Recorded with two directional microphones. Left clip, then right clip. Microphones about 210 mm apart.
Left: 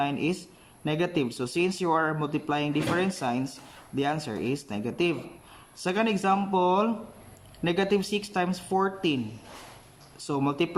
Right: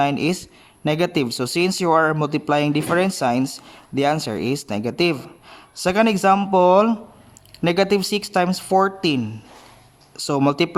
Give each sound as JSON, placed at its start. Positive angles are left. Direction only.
{"t": 0.0, "sound": "speech", "side_deg": -50}
{"t": 10.2, "sound": "speech", "side_deg": -50}